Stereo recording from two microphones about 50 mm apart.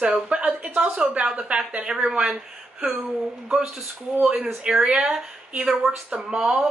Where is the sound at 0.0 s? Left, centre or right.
Right.